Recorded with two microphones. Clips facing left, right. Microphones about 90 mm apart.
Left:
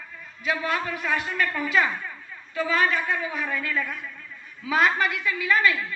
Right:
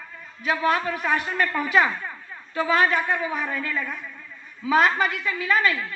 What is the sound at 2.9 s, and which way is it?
Speech, 30° right (ahead or behind).